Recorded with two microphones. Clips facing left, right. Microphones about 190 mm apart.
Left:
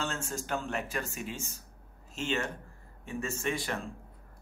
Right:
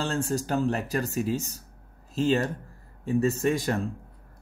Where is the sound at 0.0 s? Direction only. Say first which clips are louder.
Right 8 dB; 35° right (ahead or behind).